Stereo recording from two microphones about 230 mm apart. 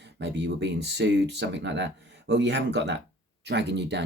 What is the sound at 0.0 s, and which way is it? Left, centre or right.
Speech, right.